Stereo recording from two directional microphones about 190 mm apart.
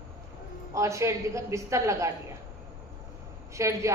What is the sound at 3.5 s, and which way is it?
Speech, 15° right (ahead or behind).